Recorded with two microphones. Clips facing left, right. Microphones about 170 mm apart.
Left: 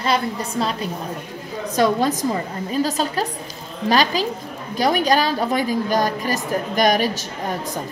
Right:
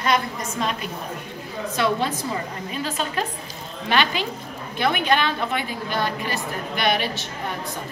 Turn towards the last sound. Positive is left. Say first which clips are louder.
# left 5 dB
turn(degrees=40)  # may be behind; listen again after turning